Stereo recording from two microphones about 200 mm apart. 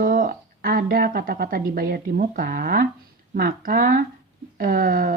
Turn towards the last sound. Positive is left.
turn(degrees=-45)  # may be behind; listen again after turning